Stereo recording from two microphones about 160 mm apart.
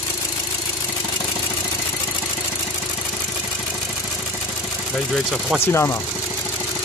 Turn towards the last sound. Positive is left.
turn(degrees=15)  # may be behind; listen again after turning